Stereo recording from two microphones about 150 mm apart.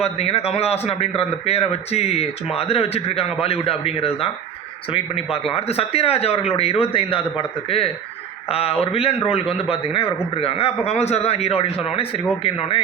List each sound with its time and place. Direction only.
0.0 s a man's voice: 45° left (ahead or behind)